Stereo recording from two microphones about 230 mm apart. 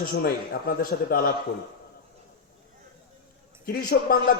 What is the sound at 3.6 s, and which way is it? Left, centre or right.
Speech, left.